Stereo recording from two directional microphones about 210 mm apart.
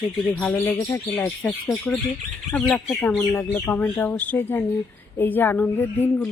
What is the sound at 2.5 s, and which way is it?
Speech, 5° left (ahead or behind).